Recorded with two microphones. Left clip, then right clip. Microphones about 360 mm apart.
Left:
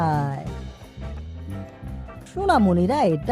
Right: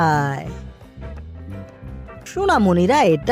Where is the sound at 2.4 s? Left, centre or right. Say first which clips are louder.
Right 3 dB; centre.